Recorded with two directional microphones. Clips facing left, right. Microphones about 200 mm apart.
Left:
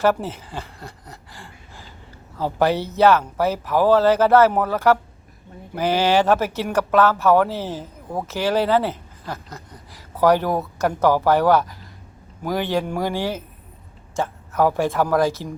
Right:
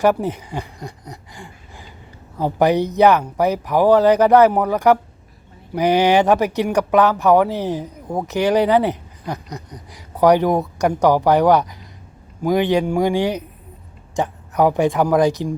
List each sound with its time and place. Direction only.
0.0 s speech: 15° right (ahead or behind)